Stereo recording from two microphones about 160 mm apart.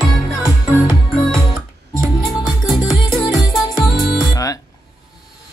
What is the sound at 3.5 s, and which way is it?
Music, centre (ahead or behind).